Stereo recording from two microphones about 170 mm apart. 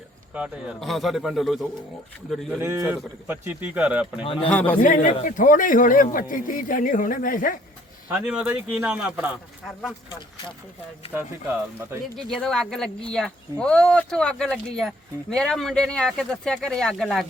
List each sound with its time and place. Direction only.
0.3 s speech: 5° right (ahead or behind)
2.6 s speech: 15° right (ahead or behind)
4.2 s speech: 35° left (ahead or behind)
4.4 s a man's voice: 10° left (ahead or behind)
4.8 s a man's voice: 50° left (ahead or behind)
8.1 s speech: 10° right (ahead or behind)
11.1 s speech: 10° right (ahead or behind)
12.1 s speech: 5° left (ahead or behind)